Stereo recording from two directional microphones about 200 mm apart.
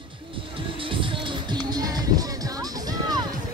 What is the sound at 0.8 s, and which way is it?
Music, 25° right (ahead or behind).